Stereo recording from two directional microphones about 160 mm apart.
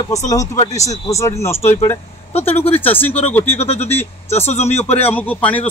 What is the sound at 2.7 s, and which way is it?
Speech, 10° left (ahead or behind).